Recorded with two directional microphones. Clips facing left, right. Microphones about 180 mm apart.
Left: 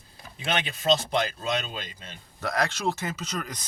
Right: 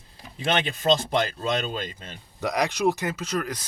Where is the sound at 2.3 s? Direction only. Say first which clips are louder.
Right 3 dB; 15° right (ahead or behind).